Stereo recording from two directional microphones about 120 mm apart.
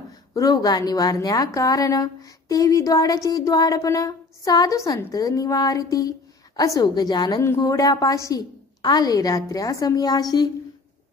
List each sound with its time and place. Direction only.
0.3 s a woman's voice: 30° left (ahead or behind)
7.4 s a woman's voice: 25° left (ahead or behind)